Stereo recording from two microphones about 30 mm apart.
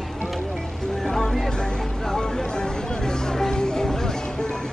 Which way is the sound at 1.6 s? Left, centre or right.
Left.